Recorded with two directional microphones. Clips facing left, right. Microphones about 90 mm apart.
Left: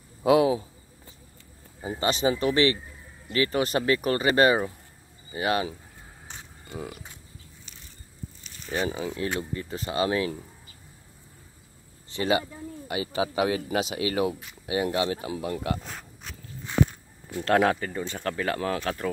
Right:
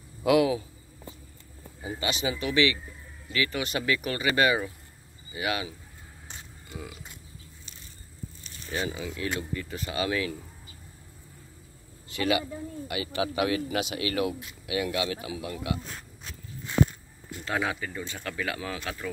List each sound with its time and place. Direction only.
0.2 s a man's voice: 30° left (ahead or behind)
1.8 s a man's voice: 35° left (ahead or behind)
8.6 s a man's voice: 35° left (ahead or behind)
12.1 s a man's voice: 30° left (ahead or behind)
17.5 s speech: 55° left (ahead or behind)